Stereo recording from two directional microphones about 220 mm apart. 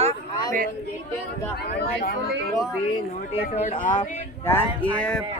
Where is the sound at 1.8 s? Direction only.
45° left (ahead or behind).